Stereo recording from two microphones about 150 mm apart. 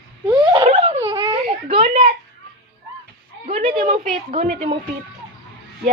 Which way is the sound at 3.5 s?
40° right (ahead or behind).